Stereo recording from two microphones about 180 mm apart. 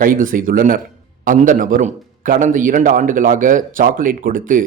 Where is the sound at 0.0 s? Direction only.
50° right (ahead or behind).